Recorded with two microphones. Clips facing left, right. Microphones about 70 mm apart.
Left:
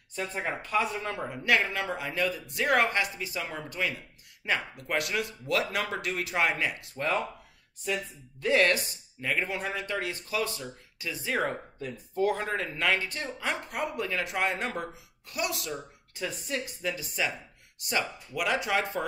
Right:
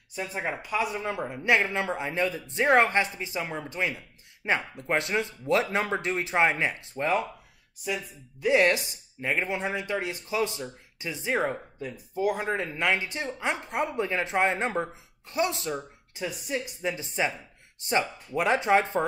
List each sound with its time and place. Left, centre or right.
0.1 s speech: centre; by 15.8 s right
16.2 s speech: centre